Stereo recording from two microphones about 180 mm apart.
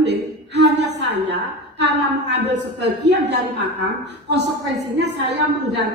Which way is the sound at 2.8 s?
65° right (ahead or behind).